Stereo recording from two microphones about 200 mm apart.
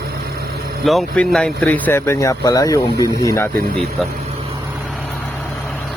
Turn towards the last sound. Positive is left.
turn(degrees=5)  # may be behind; listen again after turning